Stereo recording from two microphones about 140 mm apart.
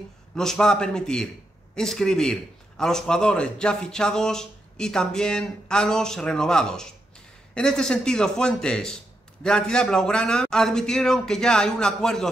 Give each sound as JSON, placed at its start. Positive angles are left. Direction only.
{"t": 0.4, "sound": "a man's voice", "side_deg": 5}